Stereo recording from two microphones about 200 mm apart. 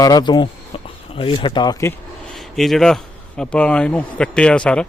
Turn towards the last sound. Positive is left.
turn(degrees=5)  # may be behind; listen again after turning